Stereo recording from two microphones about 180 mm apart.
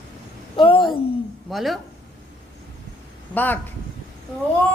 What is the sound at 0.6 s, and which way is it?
Speech, 25° left (ahead or behind).